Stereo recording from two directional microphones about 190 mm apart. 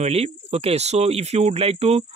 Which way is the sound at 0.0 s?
35° right (ahead or behind).